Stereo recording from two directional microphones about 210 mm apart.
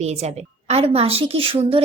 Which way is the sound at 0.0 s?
30° right (ahead or behind).